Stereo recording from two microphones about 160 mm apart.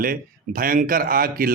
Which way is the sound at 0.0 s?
65° right (ahead or behind).